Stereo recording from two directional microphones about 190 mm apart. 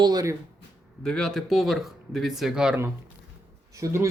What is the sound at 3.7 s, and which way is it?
Speech, 15° right (ahead or behind).